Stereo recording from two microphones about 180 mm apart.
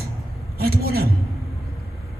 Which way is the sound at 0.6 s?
60° right (ahead or behind).